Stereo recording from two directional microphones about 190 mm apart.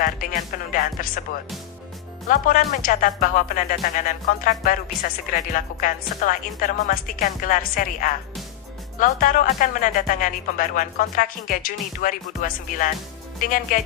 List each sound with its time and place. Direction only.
0.0 s speech: 45° left (ahead or behind)
2.2 s speech: 45° left (ahead or behind)
9.0 s speech: 45° left (ahead or behind)